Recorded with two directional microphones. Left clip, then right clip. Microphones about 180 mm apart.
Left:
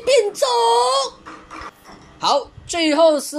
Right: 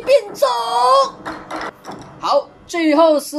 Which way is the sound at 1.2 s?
55° right (ahead or behind).